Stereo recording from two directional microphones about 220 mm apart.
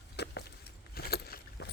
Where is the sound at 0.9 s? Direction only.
45° left (ahead or behind).